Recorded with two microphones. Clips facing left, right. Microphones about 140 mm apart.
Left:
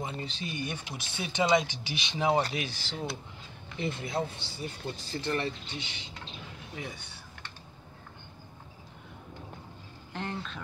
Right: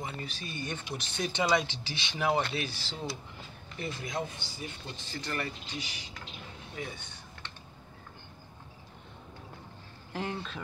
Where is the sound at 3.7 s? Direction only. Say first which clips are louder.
Left 3 dB; 25° left (ahead or behind).